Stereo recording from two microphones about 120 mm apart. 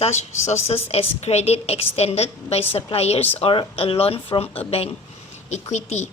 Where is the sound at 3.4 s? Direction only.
50° left (ahead or behind).